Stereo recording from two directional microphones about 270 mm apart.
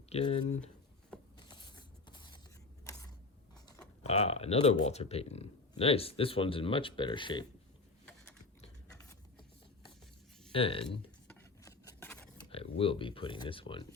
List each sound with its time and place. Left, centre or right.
0.1 s speech: left
1.4 s creak: centre
4.0 s speech: left
10.5 s speech: centre
10.8 s a sound: centre
12.5 s speech: left